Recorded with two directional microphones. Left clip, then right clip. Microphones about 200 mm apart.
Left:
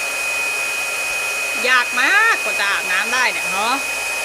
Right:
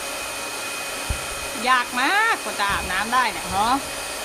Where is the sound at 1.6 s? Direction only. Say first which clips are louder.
Left 4 dB; 15° right (ahead or behind).